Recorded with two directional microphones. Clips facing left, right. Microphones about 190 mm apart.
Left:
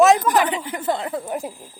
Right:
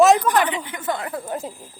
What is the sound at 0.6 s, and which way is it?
Speech, 35° left (ahead or behind).